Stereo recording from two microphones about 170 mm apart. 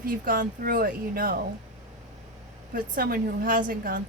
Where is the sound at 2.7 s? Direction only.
55° right (ahead or behind).